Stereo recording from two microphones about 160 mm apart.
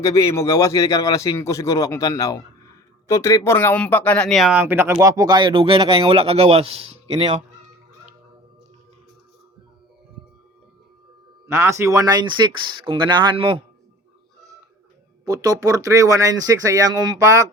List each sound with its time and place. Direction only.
0.0 s speech: 20° left (ahead or behind); by 7.3 s 30° right (ahead or behind)
11.4 s speech: 15° right (ahead or behind); by 13.6 s 30° right (ahead or behind)
15.2 s speech: 25° right (ahead or behind)